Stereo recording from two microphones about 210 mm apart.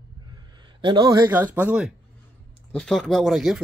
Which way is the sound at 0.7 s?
20° right (ahead or behind).